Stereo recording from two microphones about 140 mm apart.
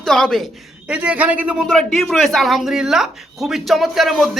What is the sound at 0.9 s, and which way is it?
A woman's voice, 10° right (ahead or behind).